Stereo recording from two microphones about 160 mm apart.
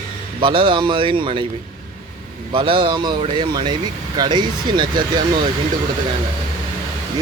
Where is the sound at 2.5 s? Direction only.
30° right (ahead or behind).